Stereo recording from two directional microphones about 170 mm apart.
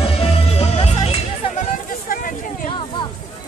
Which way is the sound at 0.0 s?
35° left (ahead or behind).